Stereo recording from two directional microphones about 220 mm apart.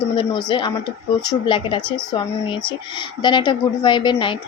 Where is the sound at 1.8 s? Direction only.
5° left (ahead or behind).